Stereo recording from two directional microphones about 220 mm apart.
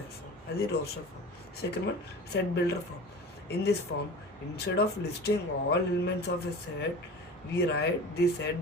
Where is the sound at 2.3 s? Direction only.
50° left (ahead or behind).